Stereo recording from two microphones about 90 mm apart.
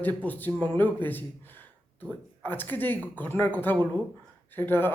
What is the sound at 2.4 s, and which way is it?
Speech, 20° left (ahead or behind).